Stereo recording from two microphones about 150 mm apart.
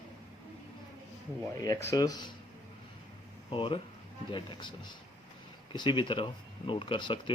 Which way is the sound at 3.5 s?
35° left (ahead or behind).